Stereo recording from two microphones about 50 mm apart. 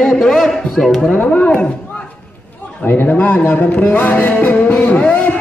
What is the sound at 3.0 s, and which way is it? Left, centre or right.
Speech, left.